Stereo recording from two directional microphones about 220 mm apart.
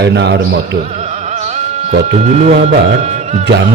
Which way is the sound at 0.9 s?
30° right (ahead or behind).